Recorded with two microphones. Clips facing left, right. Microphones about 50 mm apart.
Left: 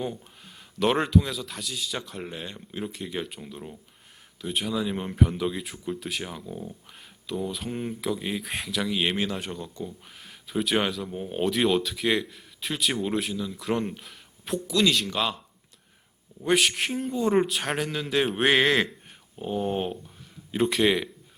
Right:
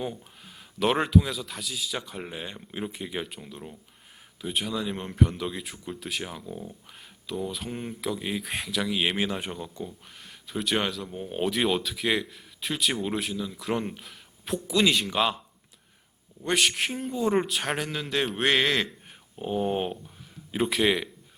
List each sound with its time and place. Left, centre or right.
0.8 s speech: centre
10.2 s speech: centre
16.4 s speech: centre
19.4 s a sound: centre
20.5 s speech: centre